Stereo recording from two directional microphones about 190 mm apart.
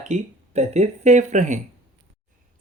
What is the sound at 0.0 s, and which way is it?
Speech, 35° right (ahead or behind).